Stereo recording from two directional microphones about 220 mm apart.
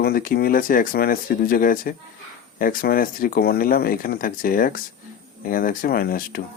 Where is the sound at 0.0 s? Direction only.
40° left (ahead or behind).